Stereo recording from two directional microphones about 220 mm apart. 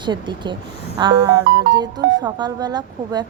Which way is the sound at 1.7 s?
20° right (ahead or behind).